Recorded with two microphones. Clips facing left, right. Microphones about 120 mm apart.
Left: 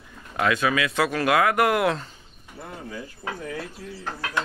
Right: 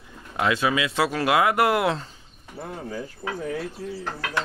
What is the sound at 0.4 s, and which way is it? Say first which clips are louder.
Speech: even; 25° right (ahead or behind).